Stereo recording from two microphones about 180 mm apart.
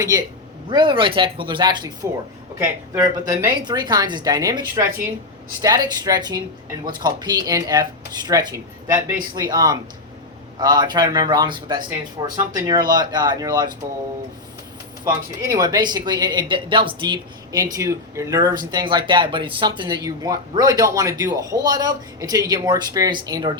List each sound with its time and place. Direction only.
0.7 s speech: 25° right (ahead or behind)
2.9 s speech: 20° right (ahead or behind)
15.0 s speech: 20° right (ahead or behind)